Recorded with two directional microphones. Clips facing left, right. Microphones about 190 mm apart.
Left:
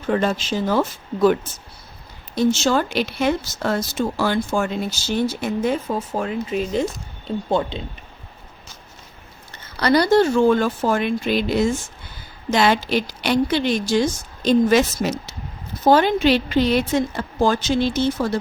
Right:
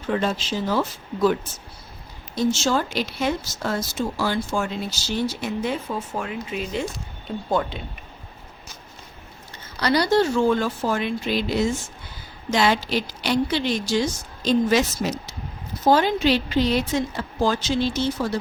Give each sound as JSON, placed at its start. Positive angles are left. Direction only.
{"t": 0.1, "sound": "speech", "side_deg": 50}
{"t": 5.6, "sound": "speech", "side_deg": 40}
{"t": 7.6, "sound": "speech", "side_deg": 25}
{"t": 9.8, "sound": "speech", "side_deg": 50}